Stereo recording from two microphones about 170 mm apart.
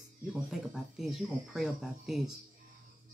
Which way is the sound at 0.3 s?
Centre (ahead or behind).